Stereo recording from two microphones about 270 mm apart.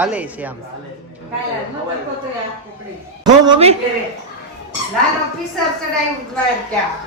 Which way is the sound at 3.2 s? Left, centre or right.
Centre.